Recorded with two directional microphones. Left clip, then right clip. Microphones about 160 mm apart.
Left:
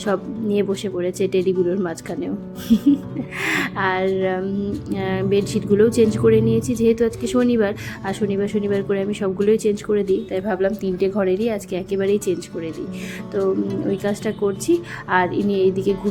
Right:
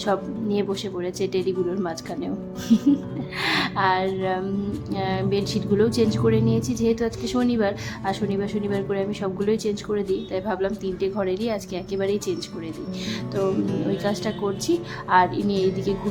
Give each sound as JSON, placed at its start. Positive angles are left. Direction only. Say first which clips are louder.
{"t": 0.0, "sound": "speech", "louder": "left 2 dB", "side_deg": 15}
{"t": 14.0, "sound": "speech", "louder": "left 3 dB", "side_deg": 15}